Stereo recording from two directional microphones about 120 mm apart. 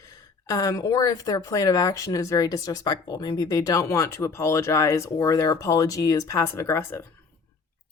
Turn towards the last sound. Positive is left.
turn(degrees=25)  # may be behind; listen again after turning